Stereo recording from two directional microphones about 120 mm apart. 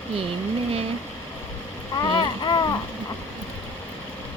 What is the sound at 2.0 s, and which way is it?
Speech, 40° left (ahead or behind).